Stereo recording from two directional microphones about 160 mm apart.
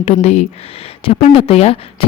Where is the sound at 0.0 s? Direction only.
40° left (ahead or behind).